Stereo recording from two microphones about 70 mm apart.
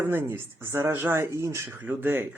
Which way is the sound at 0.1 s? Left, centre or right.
Right.